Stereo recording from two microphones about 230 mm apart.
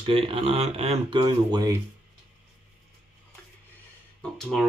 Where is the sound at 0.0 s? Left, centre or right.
Right.